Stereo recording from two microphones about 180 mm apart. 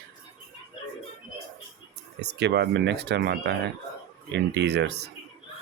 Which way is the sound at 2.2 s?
70° right (ahead or behind).